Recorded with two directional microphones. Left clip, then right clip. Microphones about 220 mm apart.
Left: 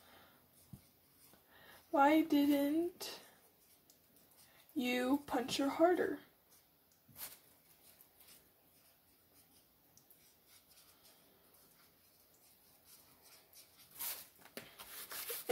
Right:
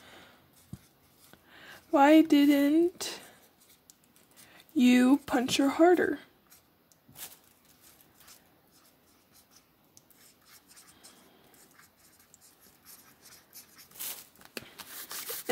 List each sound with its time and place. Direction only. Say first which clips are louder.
1.9 s speech: right 9 dB; 30° right (ahead or behind)
4.7 s speech: right 12 dB; 35° right (ahead or behind)